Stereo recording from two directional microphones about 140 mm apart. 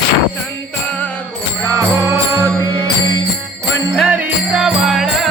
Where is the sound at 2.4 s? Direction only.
25° right (ahead or behind).